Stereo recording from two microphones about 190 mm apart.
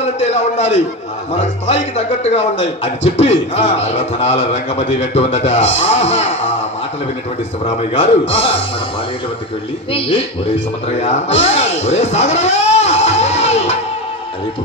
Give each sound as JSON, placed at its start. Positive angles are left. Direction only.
{"t": 0.0, "sound": "a man's voice", "side_deg": 35}
{"t": 7.9, "sound": "a man's voice", "side_deg": 30}
{"t": 9.9, "sound": "a man's voice", "side_deg": 30}
{"t": 11.0, "sound": "a sound", "side_deg": 35}